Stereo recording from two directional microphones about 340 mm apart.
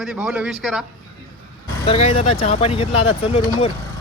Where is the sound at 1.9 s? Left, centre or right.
Centre.